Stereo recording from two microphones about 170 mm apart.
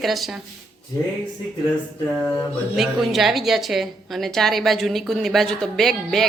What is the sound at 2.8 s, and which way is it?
A woman's voice, centre (ahead or behind).